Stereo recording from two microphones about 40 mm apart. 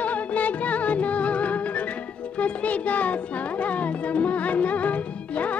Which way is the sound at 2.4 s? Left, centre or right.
Left.